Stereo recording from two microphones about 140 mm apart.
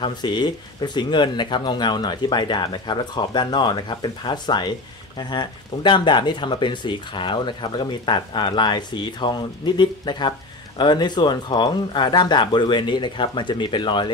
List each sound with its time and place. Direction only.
0.0 s speech: 30° left (ahead or behind)